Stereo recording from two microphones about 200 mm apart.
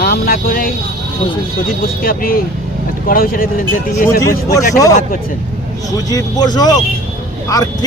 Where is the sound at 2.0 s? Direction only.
45° left (ahead or behind).